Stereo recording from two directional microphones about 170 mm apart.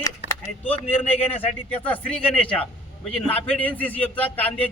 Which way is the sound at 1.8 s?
10° left (ahead or behind).